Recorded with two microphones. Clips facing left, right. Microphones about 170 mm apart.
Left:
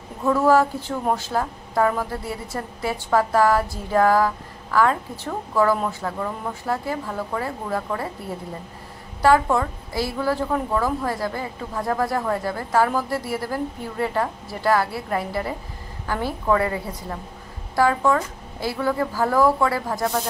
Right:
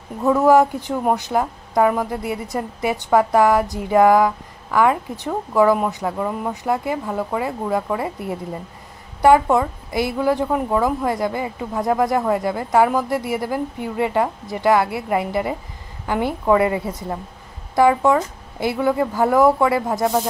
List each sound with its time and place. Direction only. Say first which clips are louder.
0.2 s a woman's voice: right 4 dB; 20° right (ahead or behind)